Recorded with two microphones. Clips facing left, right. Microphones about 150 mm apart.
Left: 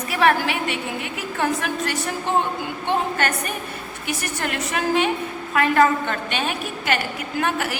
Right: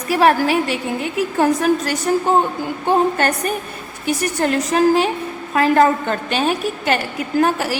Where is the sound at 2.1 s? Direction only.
40° right (ahead or behind).